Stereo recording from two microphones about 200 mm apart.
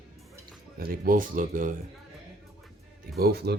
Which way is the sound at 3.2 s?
50° right (ahead or behind).